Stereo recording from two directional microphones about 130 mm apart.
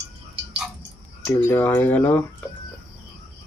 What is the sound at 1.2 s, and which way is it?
Speech, 15° left (ahead or behind).